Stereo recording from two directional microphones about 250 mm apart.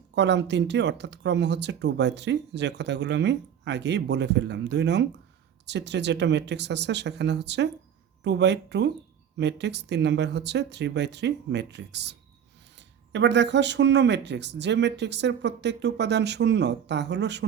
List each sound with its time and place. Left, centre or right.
0.1 s speech: right
13.1 s speech: right